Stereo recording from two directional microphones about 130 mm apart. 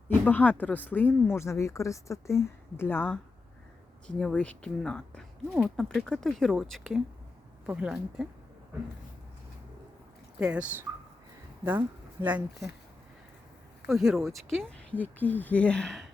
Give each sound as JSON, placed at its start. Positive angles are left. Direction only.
{"t": 0.3, "sound": "speech", "side_deg": 10}
{"t": 7.7, "sound": "speech", "side_deg": -10}
{"t": 10.4, "sound": "speech", "side_deg": -10}
{"t": 13.8, "sound": "speech", "side_deg": -5}